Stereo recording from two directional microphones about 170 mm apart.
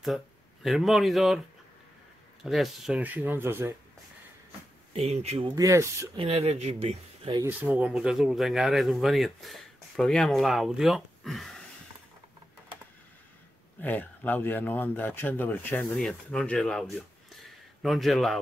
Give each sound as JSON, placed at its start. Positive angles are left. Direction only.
{"t": 0.0, "sound": "speech", "side_deg": 0}
{"t": 2.4, "sound": "speech", "side_deg": 0}
{"t": 4.9, "sound": "speech", "side_deg": -40}
{"t": 5.6, "sound": "speech", "side_deg": -15}
{"t": 6.1, "sound": "speech", "side_deg": -35}
{"t": 7.7, "sound": "speech", "side_deg": -5}
{"t": 13.7, "sound": "speech", "side_deg": 10}
{"t": 17.4, "sound": "a sound", "side_deg": 0}